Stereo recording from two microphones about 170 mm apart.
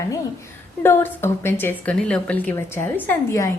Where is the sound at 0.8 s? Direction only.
15° left (ahead or behind).